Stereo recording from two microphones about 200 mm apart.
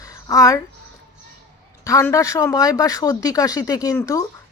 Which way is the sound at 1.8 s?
15° left (ahead or behind).